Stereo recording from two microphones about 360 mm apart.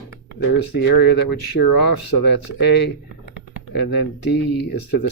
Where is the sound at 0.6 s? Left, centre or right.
Left.